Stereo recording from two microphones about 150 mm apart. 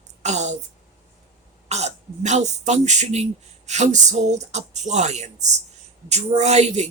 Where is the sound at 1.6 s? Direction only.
50° right (ahead or behind).